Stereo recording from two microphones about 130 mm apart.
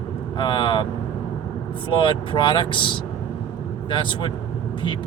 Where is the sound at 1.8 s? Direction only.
40° left (ahead or behind).